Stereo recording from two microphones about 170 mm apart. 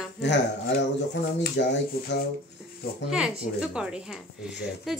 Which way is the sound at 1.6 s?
90° left.